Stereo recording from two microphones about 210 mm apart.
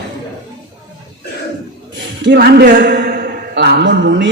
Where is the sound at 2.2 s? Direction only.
55° right (ahead or behind).